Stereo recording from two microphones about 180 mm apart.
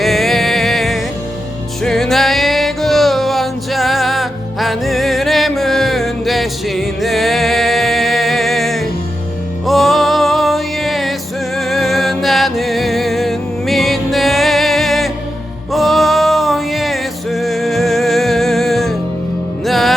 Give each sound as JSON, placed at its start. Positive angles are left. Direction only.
{"t": 0.0, "sound": "music", "side_deg": 0}